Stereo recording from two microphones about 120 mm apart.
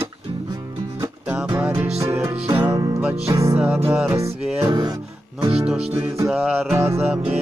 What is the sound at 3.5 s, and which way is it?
Music, 10° right (ahead or behind).